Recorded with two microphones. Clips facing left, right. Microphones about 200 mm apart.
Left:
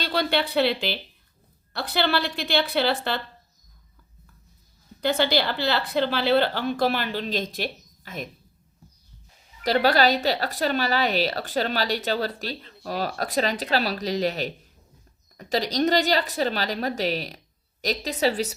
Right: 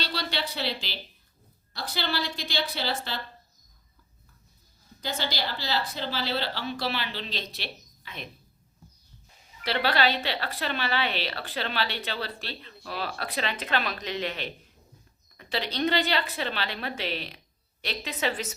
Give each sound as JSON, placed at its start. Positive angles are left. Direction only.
{"t": 0.0, "sound": "a woman's voice", "side_deg": 55}
{"t": 4.9, "sound": "a woman's voice", "side_deg": 60}
{"t": 9.6, "sound": "speech", "side_deg": 40}